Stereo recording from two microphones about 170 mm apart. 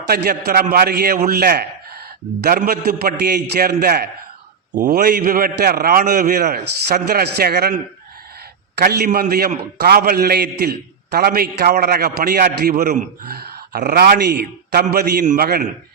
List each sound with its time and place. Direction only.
0.1 s a man's voice: 60° right (ahead or behind)
4.7 s a man's voice: 50° right (ahead or behind)
12.7 s a man's voice: 45° right (ahead or behind)
13.3 s a man's voice: 65° right (ahead or behind)
15.2 s a man's voice: 50° right (ahead or behind)